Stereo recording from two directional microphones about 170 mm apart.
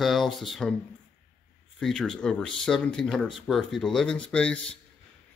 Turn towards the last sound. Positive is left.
turn(degrees=5)  # may be behind; listen again after turning